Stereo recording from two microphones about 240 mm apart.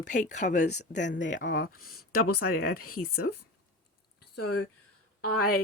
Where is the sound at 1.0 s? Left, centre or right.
Left.